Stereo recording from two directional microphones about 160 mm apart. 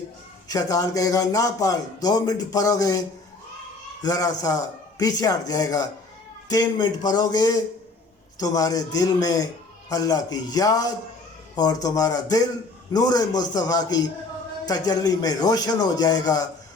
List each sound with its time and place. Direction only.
0.4 s speech: 20° left (ahead or behind)
4.0 s speech: 20° left (ahead or behind)